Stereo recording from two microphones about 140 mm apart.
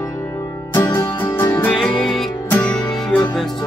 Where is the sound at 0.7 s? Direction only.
15° left (ahead or behind).